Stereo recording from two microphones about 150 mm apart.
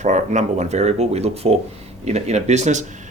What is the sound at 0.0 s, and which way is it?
Speech, 50° right (ahead or behind).